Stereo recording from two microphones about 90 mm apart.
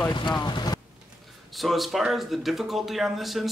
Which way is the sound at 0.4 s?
50° left (ahead or behind).